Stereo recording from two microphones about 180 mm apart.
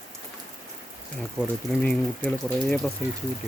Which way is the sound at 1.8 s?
5° left (ahead or behind).